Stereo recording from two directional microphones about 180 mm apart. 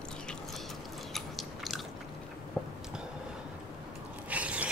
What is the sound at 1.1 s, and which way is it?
Chewing, centre (ahead or behind).